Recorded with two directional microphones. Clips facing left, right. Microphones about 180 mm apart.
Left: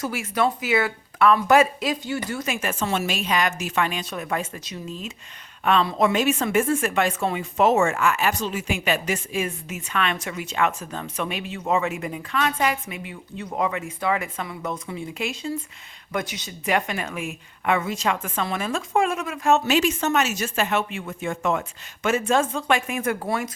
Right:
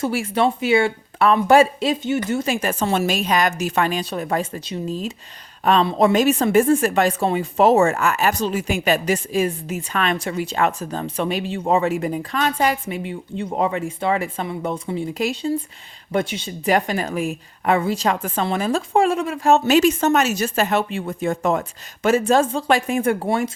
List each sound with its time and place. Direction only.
0.0 s speech: 30° right (ahead or behind)